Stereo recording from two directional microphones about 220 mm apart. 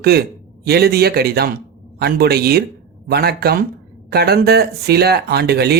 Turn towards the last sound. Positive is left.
turn(degrees=-45)  # may be behind; listen again after turning